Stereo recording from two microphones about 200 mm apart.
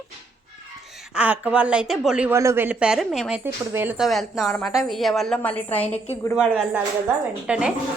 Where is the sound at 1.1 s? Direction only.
5° right (ahead or behind); by 6.3 s 10° left (ahead or behind).